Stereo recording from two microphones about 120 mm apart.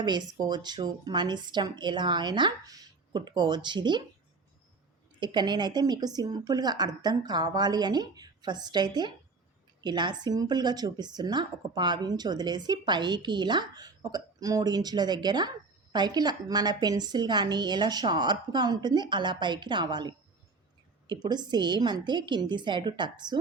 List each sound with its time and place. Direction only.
0.0 s a woman's voice: 35° right (ahead or behind)
5.2 s a woman's voice: 40° right (ahead or behind)
21.2 s a woman's voice: 35° right (ahead or behind)